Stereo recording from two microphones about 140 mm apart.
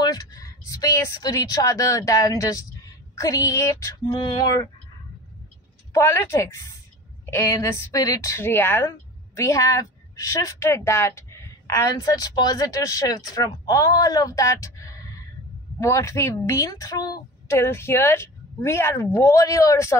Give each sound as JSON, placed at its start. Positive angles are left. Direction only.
{"t": 0.0, "sound": "a woman's voice", "side_deg": 25}
{"t": 5.9, "sound": "a woman's voice", "side_deg": 20}